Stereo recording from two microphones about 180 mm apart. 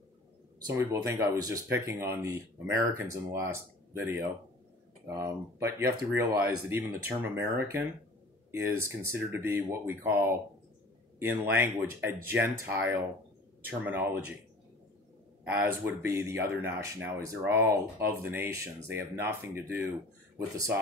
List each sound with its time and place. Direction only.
0.7 s speech: 15° right (ahead or behind)
15.4 s speech: 10° right (ahead or behind)